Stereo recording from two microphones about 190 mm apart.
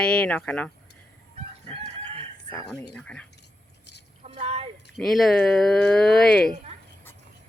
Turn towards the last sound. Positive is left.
turn(degrees=0)  # may be behind; listen again after turning